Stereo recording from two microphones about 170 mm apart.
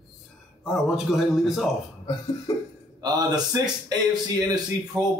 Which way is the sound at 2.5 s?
20° left (ahead or behind).